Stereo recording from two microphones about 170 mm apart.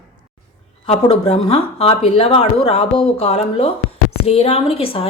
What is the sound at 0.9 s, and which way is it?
A woman's voice, 35° left (ahead or behind).